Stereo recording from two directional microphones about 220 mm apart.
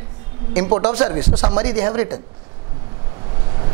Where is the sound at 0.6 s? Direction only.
30° right (ahead or behind).